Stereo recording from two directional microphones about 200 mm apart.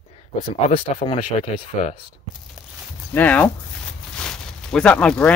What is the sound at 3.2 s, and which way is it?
Speech, 5° left (ahead or behind).